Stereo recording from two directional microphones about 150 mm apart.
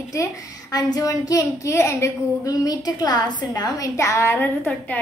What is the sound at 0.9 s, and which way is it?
Child singing, 25° left (ahead or behind).